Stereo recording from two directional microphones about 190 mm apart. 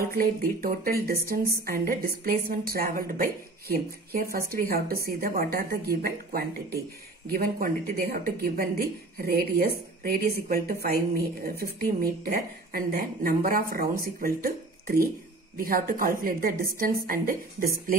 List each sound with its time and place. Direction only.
0.1 s speech: 50° right (ahead or behind)